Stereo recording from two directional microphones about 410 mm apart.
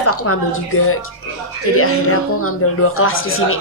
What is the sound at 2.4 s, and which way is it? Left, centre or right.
A woman's voice, left.